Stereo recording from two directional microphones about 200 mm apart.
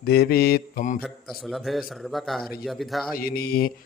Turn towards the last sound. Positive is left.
turn(degrees=50)  # may be behind; listen again after turning